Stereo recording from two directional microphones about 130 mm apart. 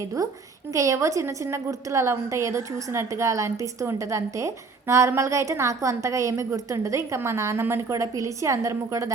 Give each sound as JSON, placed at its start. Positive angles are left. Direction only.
{"t": 0.2, "sound": "a woman's voice", "side_deg": -25}